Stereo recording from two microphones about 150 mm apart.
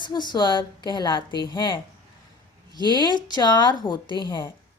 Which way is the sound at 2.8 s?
30° left (ahead or behind).